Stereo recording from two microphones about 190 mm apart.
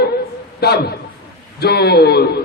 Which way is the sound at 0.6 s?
55° left (ahead or behind).